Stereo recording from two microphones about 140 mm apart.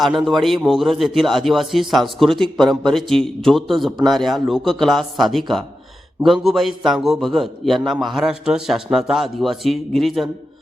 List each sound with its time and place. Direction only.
0.0 s a man's voice: centre (ahead or behind)